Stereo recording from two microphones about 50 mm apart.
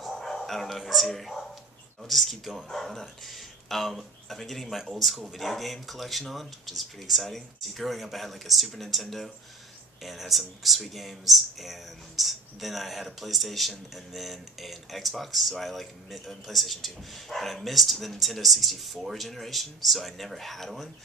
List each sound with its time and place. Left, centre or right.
0.2 s speech: centre